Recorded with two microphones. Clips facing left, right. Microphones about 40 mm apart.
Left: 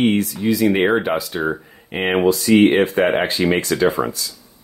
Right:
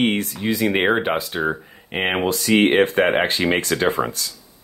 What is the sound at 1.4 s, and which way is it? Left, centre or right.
Speech, centre.